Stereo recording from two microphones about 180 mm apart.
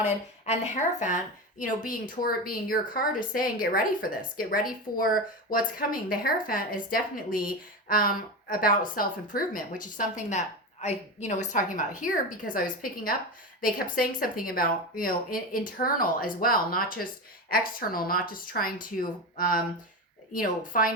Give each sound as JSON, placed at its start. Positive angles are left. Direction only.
{"t": 0.0, "sound": "a woman's voice", "side_deg": 40}